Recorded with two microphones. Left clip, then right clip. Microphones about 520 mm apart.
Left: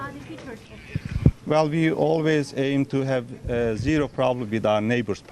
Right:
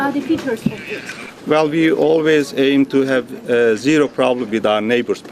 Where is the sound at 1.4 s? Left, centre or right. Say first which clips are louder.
Right 8 dB; left.